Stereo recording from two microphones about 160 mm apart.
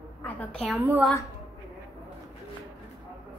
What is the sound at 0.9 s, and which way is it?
Speech, 5° right (ahead or behind).